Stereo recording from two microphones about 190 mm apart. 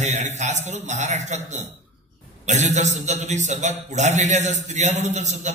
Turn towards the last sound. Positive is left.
turn(degrees=-40)  # may be behind; listen again after turning